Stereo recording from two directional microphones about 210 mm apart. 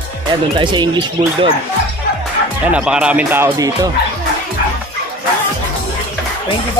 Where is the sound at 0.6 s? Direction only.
20° right (ahead or behind).